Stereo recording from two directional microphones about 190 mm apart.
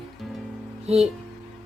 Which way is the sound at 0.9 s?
30° right (ahead or behind).